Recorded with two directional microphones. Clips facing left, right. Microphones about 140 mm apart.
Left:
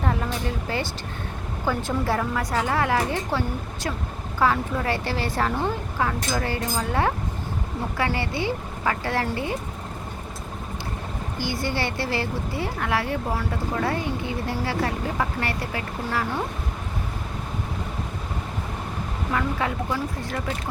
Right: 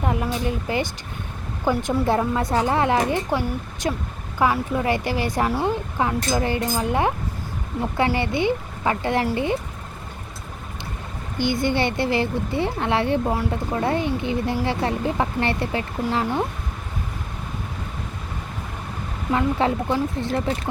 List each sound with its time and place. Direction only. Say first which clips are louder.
0.0 s a woman's voice: right 3 dB; 15° right (ahead or behind)
11.3 s a woman's voice: right 6 dB; 20° right (ahead or behind)
19.3 s speech: right 6 dB; 25° right (ahead or behind)